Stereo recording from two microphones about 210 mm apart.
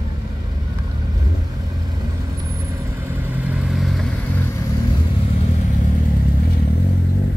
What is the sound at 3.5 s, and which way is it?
Vehicle, centre (ahead or behind).